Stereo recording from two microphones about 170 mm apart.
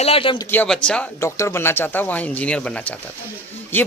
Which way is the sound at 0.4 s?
10° left (ahead or behind).